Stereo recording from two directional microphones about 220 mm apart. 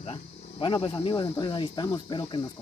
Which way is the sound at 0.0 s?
25° left (ahead or behind).